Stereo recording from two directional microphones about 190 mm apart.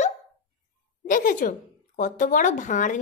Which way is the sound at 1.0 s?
45° left (ahead or behind).